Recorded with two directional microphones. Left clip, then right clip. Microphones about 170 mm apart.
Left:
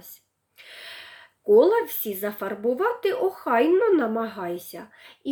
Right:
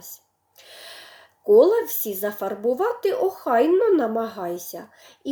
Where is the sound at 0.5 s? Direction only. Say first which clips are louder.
Left 1 dB; 15° left (ahead or behind).